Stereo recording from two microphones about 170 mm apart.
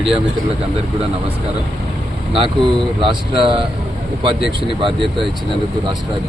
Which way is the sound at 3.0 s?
30° right (ahead or behind).